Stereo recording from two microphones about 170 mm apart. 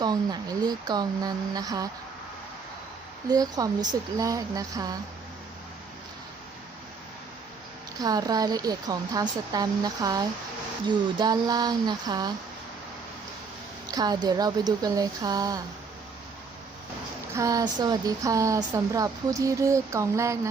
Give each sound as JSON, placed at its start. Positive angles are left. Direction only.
{"t": 0.0, "sound": "speech", "side_deg": -25}
{"t": 3.2, "sound": "speech", "side_deg": -20}
{"t": 8.0, "sound": "speech", "side_deg": -20}
{"t": 13.8, "sound": "speech", "side_deg": -25}
{"t": 17.3, "sound": "speech", "side_deg": -20}